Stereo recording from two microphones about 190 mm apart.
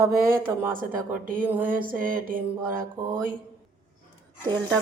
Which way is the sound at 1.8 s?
45° right (ahead or behind).